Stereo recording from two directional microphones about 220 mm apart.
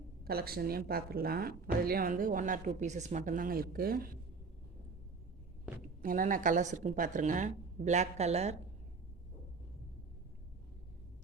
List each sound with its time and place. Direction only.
0.3 s speech: 45° right (ahead or behind)
6.0 s speech: 40° right (ahead or behind)